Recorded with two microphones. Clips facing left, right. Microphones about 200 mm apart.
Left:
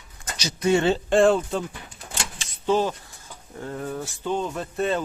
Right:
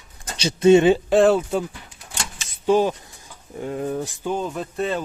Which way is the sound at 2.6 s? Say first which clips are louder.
Right 4 dB; 15° right (ahead or behind).